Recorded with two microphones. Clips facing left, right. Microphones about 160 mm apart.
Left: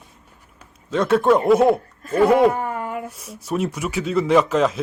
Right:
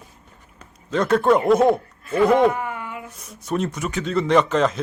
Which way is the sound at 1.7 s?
40° left (ahead or behind).